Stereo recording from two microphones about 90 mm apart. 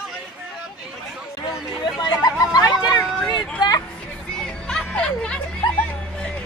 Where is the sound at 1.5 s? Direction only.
5° right (ahead or behind).